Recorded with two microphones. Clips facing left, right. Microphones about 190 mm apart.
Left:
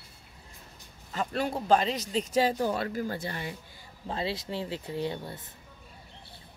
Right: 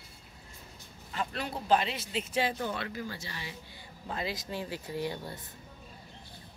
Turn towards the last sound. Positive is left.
turn(degrees=20)  # may be behind; listen again after turning